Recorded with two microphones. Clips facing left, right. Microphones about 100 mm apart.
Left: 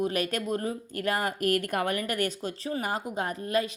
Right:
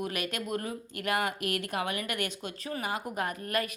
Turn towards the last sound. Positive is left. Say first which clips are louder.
# left 4 dB
turn(degrees=25)  # may be behind; listen again after turning